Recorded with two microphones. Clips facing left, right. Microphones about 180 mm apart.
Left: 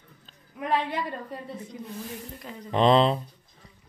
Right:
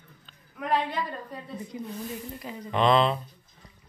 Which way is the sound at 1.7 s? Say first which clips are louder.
Right 3 dB; 5° right (ahead or behind).